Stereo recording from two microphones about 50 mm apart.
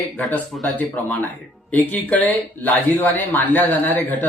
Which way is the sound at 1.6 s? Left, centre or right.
Left.